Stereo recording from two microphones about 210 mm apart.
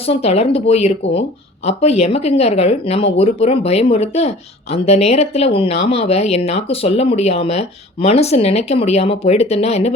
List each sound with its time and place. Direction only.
0.0 s speech: 30° left (ahead or behind)